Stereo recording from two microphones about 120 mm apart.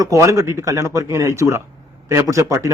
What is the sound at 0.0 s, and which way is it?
A man's voice, 25° right (ahead or behind).